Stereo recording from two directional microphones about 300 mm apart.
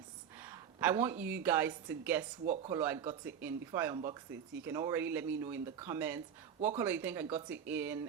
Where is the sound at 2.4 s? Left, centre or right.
Right.